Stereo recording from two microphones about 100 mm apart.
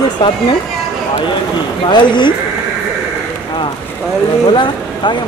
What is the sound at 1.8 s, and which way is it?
Speech, 50° left (ahead or behind).